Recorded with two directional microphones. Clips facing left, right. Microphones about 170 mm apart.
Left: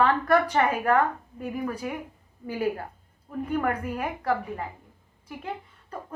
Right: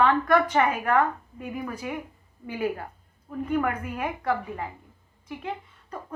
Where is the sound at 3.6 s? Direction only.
35° left (ahead or behind).